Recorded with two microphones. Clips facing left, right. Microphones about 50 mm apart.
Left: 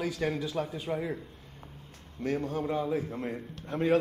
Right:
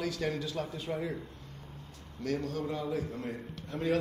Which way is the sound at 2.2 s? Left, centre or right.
Left.